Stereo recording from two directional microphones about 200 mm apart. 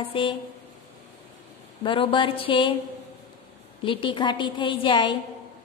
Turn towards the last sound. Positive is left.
turn(degrees=25)  # may be behind; listen again after turning